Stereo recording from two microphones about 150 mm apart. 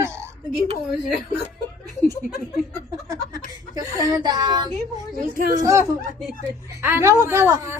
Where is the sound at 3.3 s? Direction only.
25° right (ahead or behind).